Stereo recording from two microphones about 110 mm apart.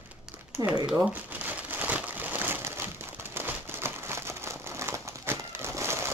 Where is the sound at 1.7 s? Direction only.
15° right (ahead or behind).